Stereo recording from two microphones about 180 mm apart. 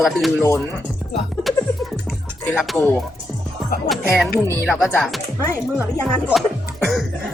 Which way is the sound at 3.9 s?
Centre (ahead or behind).